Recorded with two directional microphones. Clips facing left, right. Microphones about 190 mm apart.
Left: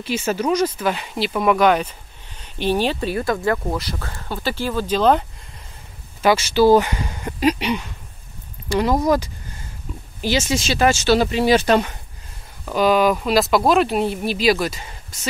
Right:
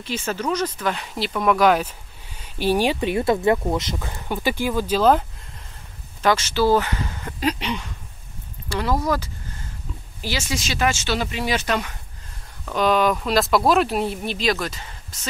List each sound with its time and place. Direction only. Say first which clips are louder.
0.0 s speech: left 4 dB; 10° left (ahead or behind)
6.2 s speech: left 4 dB; 10° left (ahead or behind); by 11.9 s 30° left (ahead or behind)
12.6 s speech: left 3 dB; 5° left (ahead or behind)